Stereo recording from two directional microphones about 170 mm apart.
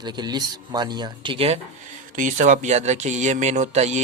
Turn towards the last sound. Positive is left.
turn(degrees=-40)  # may be behind; listen again after turning